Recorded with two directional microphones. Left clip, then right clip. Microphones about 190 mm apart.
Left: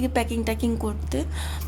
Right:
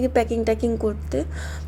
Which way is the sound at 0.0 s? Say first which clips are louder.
Right 5 dB; 10° right (ahead or behind).